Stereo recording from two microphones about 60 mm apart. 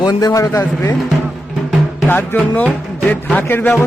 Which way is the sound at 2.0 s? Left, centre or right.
Left.